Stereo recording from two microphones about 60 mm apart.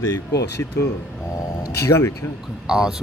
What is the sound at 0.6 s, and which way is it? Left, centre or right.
Speech, left.